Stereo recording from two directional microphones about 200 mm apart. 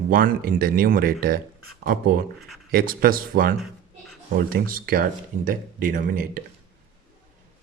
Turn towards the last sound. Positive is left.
turn(degrees=-45)  # may be behind; listen again after turning